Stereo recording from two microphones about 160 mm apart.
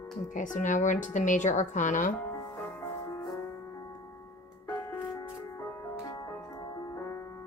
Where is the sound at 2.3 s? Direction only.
15° left (ahead or behind).